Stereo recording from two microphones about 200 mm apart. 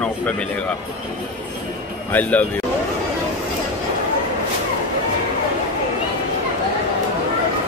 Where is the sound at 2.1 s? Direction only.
10° left (ahead or behind).